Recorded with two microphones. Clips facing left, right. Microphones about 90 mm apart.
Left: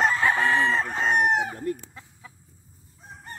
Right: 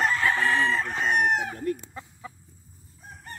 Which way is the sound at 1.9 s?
45° right (ahead or behind).